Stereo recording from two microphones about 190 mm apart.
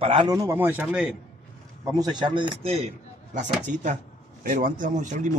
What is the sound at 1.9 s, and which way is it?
Speech, 20° right (ahead or behind).